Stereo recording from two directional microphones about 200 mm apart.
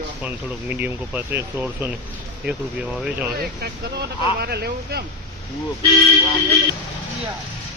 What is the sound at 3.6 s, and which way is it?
Speech, 50° right (ahead or behind).